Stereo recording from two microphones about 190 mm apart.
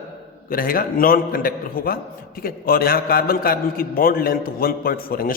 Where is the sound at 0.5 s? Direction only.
50° left (ahead or behind).